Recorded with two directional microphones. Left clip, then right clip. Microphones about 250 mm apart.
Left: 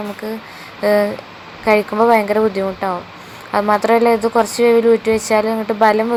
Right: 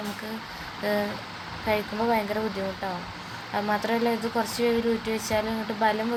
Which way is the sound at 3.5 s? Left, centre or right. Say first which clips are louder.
Left 13 dB; left.